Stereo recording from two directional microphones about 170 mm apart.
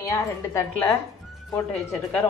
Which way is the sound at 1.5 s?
10° left (ahead or behind).